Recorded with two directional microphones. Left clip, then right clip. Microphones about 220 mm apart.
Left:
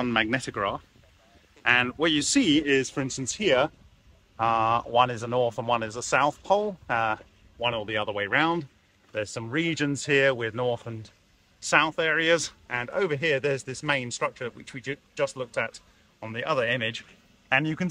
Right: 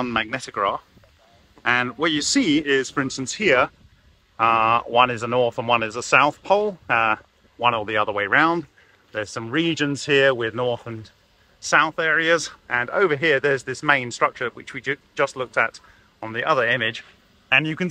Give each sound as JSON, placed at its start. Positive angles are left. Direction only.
{"t": 0.0, "sound": "a man's voice", "side_deg": 5}